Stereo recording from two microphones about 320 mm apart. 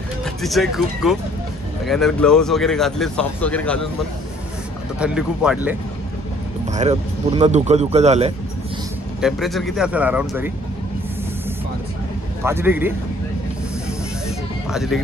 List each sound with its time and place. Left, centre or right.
0.2 s speech: centre
4.9 s speech: centre
6.7 s speech: right
9.2 s speech: centre
12.4 s speech: centre
14.7 s speech: centre